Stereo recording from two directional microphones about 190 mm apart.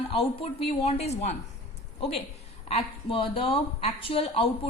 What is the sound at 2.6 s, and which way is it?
Speech, 30° left (ahead or behind).